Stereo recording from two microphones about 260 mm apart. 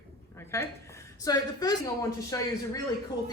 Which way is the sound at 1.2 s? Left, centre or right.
Centre.